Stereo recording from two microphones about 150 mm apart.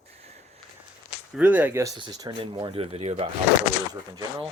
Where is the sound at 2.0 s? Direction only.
30° right (ahead or behind).